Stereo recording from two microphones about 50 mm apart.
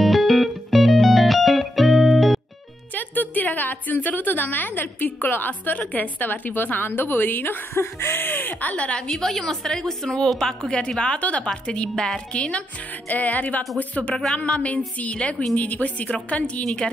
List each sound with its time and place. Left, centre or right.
0.0 s music: centre
2.9 s a woman's voice: left
9.1 s a woman's voice: centre; by 14.1 s left
14.1 s a woman's voice: centre
15.0 s a woman's voice: left
16.6 s a woman's voice: centre